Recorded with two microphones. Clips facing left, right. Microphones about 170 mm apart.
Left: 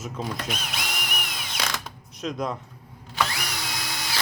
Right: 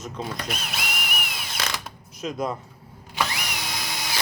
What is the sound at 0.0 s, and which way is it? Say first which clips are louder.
Ratchet: even; centre (ahead or behind).